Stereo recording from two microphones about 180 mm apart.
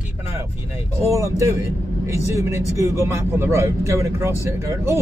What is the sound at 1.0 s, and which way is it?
Speech, 15° right (ahead or behind).